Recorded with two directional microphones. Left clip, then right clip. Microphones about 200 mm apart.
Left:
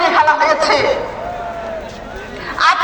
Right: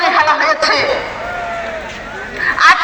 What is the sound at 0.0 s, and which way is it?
Chatter, 70° left (ahead or behind).